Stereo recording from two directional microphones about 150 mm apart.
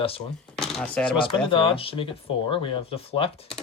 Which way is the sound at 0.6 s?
5° left (ahead or behind).